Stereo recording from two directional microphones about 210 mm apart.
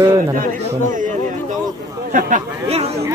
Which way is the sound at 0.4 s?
40° right (ahead or behind).